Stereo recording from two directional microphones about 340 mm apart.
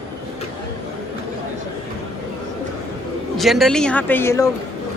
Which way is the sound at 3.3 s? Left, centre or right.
Centre.